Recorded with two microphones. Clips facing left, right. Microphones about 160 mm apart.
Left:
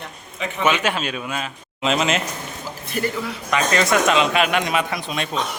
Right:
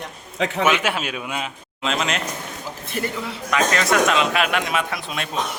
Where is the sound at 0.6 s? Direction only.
10° right (ahead or behind).